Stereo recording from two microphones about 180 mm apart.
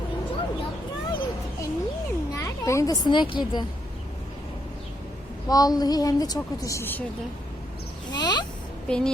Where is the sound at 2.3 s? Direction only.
15° left (ahead or behind).